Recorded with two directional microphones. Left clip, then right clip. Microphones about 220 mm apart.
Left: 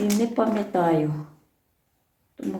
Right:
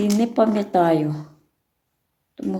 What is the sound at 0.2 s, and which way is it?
Speech, 40° right (ahead or behind).